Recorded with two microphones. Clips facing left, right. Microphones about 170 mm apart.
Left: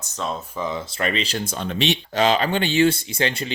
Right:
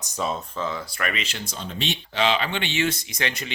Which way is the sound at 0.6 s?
20° left (ahead or behind).